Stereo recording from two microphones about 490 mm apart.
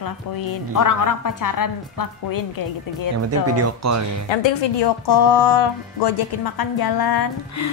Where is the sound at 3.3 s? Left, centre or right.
Right.